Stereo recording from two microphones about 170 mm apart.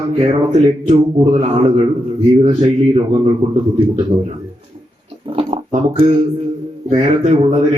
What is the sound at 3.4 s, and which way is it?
Speech, 40° right (ahead or behind).